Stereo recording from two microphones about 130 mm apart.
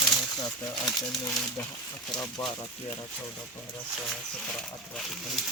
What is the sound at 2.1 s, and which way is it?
Speech, 30° left (ahead or behind).